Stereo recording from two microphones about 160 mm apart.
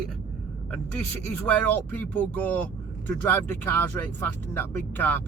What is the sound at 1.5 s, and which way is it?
Speech, 10° left (ahead or behind).